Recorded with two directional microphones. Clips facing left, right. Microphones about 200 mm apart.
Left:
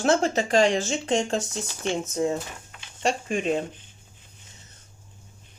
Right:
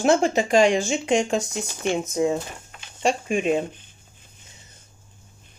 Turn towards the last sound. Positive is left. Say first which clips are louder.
# right 3 dB
turn(degrees=-15)  # may be behind; listen again after turning